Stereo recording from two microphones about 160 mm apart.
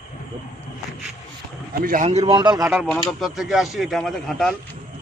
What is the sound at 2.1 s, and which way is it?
Speech, 40° right (ahead or behind).